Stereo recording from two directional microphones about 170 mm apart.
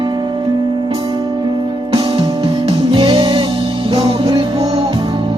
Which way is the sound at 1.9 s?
25° right (ahead or behind).